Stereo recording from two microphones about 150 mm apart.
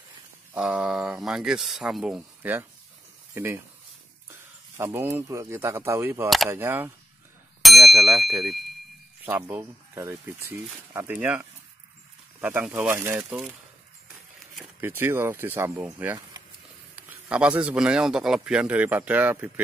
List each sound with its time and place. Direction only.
0.6 s speech: 5° right (ahead or behind)
4.3 s speech: 15° right (ahead or behind)
7.6 s speech: centre (ahead or behind)
9.2 s speech: 15° right (ahead or behind)
14.8 s speech: 15° right (ahead or behind)